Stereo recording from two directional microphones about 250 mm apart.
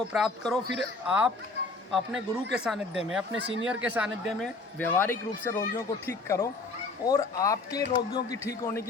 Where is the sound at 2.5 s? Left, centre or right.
Centre.